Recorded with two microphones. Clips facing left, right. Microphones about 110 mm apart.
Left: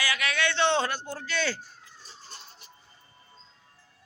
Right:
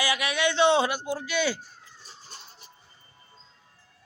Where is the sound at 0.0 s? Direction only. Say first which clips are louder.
Right 3 dB; 15° right (ahead or behind).